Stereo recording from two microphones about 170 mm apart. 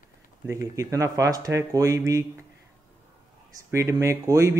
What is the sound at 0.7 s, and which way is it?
A man's voice, 20° right (ahead or behind).